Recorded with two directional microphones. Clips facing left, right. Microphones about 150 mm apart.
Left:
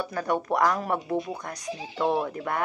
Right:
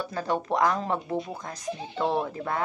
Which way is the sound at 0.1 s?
25° right (ahead or behind).